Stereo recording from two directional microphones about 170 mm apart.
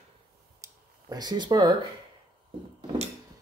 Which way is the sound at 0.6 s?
20° right (ahead or behind).